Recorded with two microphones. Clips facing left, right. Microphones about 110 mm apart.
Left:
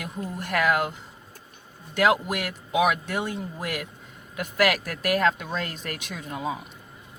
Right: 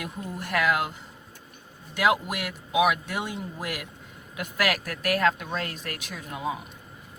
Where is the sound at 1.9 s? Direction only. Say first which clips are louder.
Left 2 dB; 5° right (ahead or behind).